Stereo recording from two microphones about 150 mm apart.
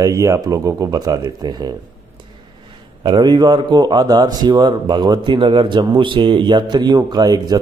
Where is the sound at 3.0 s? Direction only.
30° right (ahead or behind).